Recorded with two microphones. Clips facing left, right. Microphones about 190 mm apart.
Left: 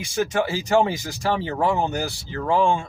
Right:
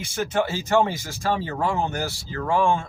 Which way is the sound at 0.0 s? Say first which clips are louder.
Left 1 dB; 15° left (ahead or behind).